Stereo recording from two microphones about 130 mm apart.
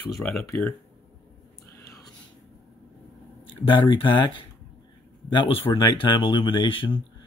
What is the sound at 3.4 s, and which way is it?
Speech, 40° left (ahead or behind).